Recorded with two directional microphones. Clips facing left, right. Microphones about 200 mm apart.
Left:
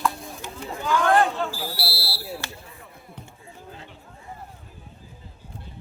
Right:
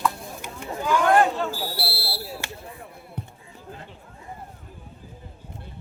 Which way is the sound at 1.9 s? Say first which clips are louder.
Right 2 dB; 55° right (ahead or behind).